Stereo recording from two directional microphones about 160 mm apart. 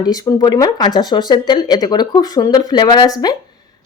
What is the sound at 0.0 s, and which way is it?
Speech, 20° left (ahead or behind).